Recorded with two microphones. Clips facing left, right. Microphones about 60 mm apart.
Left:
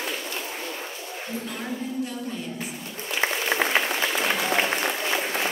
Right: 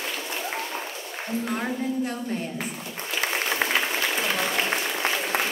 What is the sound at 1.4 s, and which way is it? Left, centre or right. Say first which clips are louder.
Speech: right 6 dB; right.